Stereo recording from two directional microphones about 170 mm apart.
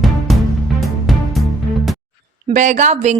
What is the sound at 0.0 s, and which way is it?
Music, centre (ahead or behind).